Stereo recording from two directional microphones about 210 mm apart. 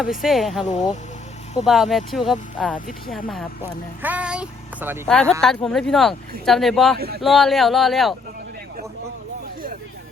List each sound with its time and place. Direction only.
0.0 s speech: centre (ahead or behind)
0.6 s speech: 35° left (ahead or behind)
1.6 s speech: centre (ahead or behind)
5.0 s speech: 5° left (ahead or behind)